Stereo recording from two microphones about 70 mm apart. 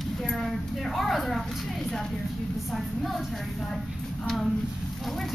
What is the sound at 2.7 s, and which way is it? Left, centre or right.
Speech, centre.